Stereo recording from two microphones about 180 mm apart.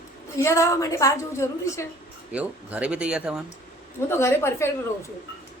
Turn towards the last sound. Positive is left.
turn(degrees=15)  # may be behind; listen again after turning